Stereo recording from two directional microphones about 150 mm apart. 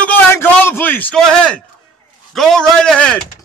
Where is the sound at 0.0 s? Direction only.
15° left (ahead or behind).